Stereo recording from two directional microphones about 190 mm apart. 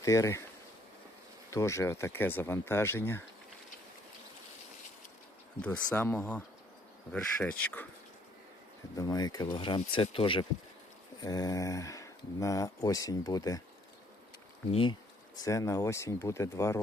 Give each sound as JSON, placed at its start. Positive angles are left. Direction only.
{"t": 0.0, "sound": "speech", "side_deg": 15}
{"t": 1.5, "sound": "speech", "side_deg": 15}
{"t": 5.6, "sound": "speech", "side_deg": 10}
{"t": 9.0, "sound": "speech", "side_deg": 20}
{"t": 14.7, "sound": "speech", "side_deg": 30}
{"t": 15.4, "sound": "speech", "side_deg": 15}